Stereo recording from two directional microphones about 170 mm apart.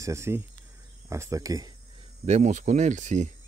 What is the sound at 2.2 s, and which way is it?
Speech, 45° right (ahead or behind).